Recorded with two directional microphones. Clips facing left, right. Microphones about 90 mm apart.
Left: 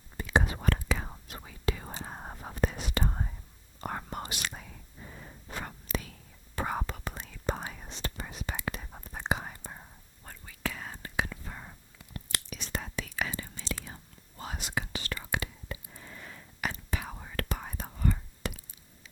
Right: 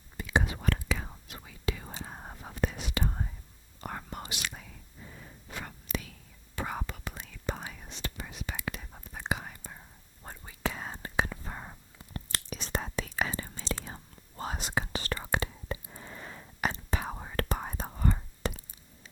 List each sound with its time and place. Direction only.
0.2 s whispering: 40° left (ahead or behind)
10.2 s whispering: 25° right (ahead or behind)